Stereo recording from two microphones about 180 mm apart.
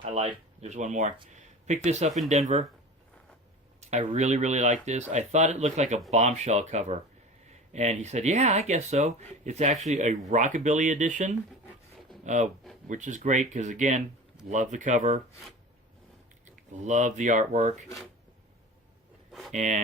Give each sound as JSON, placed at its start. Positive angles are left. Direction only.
{"t": 0.0, "sound": "speech", "side_deg": -35}
{"t": 3.8, "sound": "speech", "side_deg": -40}
{"t": 16.8, "sound": "speech", "side_deg": -40}
{"t": 19.3, "sound": "a sound", "side_deg": 0}
{"t": 19.5, "sound": "speech", "side_deg": -40}